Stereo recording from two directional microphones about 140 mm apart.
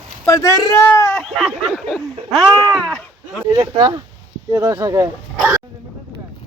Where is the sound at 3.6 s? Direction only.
35° right (ahead or behind).